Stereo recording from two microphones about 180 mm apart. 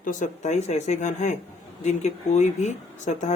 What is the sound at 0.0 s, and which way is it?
Speech, 45° left (ahead or behind).